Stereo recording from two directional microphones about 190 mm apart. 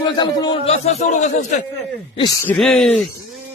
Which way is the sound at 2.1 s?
20° left (ahead or behind).